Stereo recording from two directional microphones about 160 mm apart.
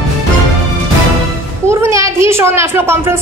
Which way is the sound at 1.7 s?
15° right (ahead or behind).